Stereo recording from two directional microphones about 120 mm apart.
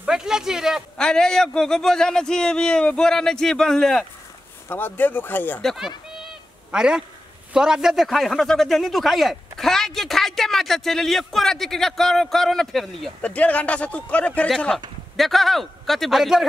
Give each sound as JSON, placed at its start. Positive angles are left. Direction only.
{"t": 0.0, "sound": "a sound", "side_deg": -5}
{"t": 0.9, "sound": "a man's voice", "side_deg": 5}
{"t": 4.6, "sound": "speech", "side_deg": 15}
{"t": 5.6, "sound": "a man's voice", "side_deg": 5}
{"t": 15.1, "sound": "a man's voice", "side_deg": 0}